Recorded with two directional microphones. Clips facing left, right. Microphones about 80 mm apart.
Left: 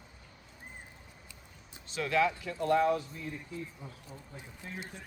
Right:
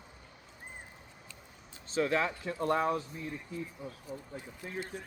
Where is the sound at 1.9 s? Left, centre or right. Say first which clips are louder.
Left 1 dB; right.